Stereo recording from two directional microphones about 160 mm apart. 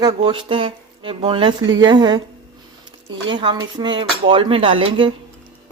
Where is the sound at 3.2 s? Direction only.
30° right (ahead or behind).